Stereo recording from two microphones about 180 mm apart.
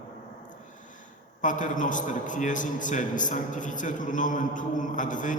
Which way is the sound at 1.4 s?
45° left (ahead or behind).